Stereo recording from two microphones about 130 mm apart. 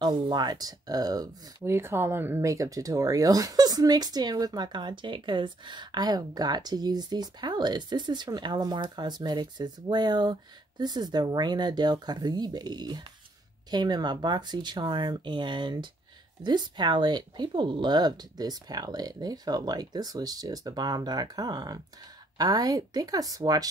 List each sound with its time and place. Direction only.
0.0 s speech: 35° right (ahead or behind)
1.6 s speech: 20° right (ahead or behind)